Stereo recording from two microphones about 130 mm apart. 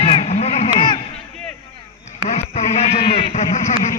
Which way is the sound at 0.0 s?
45° left (ahead or behind).